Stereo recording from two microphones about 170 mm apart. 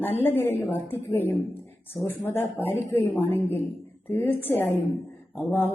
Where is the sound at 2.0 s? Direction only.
15° left (ahead or behind).